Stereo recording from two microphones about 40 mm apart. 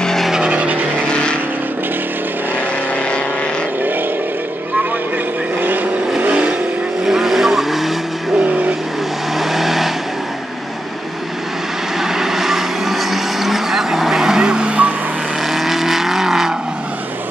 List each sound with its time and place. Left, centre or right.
0.4 s vehicle: right
1.0 s vehicle: left
5.6 s vehicle: right
7.1 s vehicle: centre
8.4 s vehicle: right
9.3 s vehicle: centre
12.0 s vehicle: centre
15.4 s vehicle: centre